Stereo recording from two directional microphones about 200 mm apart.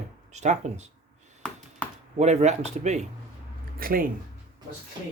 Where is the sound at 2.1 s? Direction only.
35° right (ahead or behind).